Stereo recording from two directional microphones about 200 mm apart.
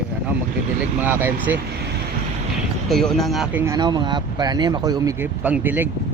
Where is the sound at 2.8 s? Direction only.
Centre (ahead or behind).